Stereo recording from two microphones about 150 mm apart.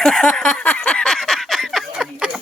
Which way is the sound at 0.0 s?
5° left (ahead or behind).